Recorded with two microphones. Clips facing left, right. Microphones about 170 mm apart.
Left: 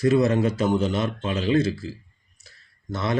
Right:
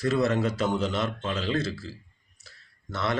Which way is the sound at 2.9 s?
15° left (ahead or behind).